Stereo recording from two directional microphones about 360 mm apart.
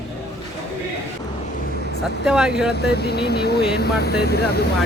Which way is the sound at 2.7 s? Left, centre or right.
Left.